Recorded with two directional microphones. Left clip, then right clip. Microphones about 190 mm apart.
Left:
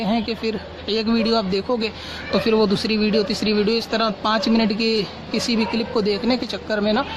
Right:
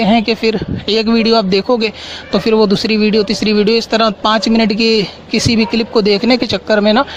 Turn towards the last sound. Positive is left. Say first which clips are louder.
# right 10 dB
turn(degrees=-45)  # may be behind; listen again after turning